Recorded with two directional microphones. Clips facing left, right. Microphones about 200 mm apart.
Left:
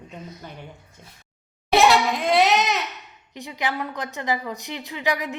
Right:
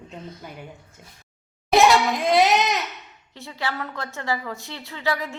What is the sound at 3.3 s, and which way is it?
A woman's voice, 15° left (ahead or behind).